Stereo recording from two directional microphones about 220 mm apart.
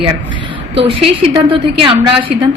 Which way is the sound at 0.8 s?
25° right (ahead or behind).